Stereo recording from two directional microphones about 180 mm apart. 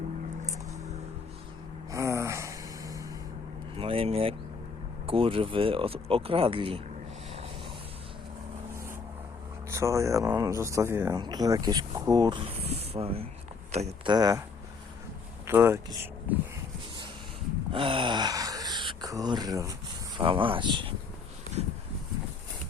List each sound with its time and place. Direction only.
1.9 s gasp: 15° right (ahead or behind)
3.8 s vehicle: 30° right (ahead or behind)
5.0 s speech: 30° right (ahead or behind)
9.6 s speech: 15° right (ahead or behind); by 14.1 s 35° right (ahead or behind)
14.1 s speech: 20° right (ahead or behind)
15.4 s speech: 15° right (ahead or behind)
17.7 s speech: 30° right (ahead or behind)